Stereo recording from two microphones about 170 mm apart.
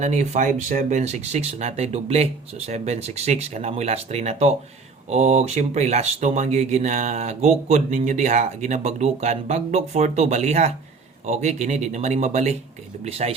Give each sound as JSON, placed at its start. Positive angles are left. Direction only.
{"t": 0.0, "sound": "speech", "side_deg": -45}